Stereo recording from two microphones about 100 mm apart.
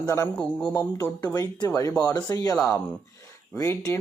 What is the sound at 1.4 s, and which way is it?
Speech, 35° left (ahead or behind).